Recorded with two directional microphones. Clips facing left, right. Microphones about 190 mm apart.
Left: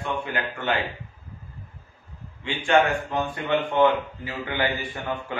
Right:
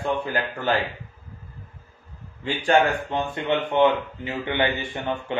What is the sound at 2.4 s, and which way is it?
Speech, 35° right (ahead or behind).